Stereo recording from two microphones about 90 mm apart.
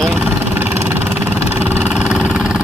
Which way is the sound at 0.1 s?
20° right (ahead or behind).